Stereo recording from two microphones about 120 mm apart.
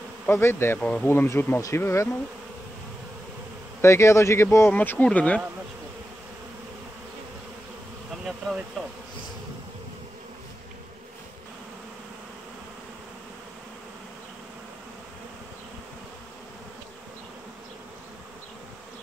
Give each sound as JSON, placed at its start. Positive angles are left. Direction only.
{"t": 0.3, "sound": "speech", "side_deg": 20}
{"t": 3.8, "sound": "speech", "side_deg": 25}
{"t": 8.8, "sound": "speech", "side_deg": 5}